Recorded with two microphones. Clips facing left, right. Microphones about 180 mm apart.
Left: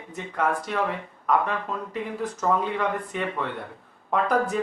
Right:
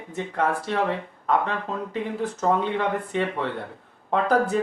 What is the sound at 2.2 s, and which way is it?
Speech, 30° right (ahead or behind).